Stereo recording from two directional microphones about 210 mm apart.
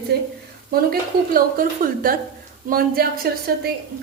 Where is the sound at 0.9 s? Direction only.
45° right (ahead or behind).